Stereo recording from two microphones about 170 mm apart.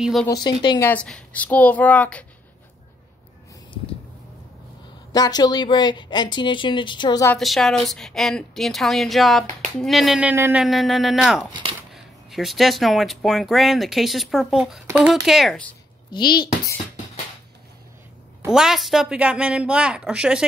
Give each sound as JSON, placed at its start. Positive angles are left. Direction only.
{"t": 0.0, "sound": "speech", "side_deg": 0}
{"t": 0.3, "sound": "speech", "side_deg": 25}
{"t": 0.8, "sound": "a child's voice", "side_deg": 5}
{"t": 5.1, "sound": "speech", "side_deg": 25}
{"t": 7.3, "sound": "speech", "side_deg": 0}
{"t": 16.1, "sound": "speech", "side_deg": 25}
{"t": 18.5, "sound": "speech", "side_deg": -5}